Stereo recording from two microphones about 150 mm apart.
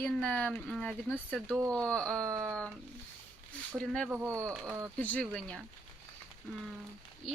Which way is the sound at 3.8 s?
5° left (ahead or behind).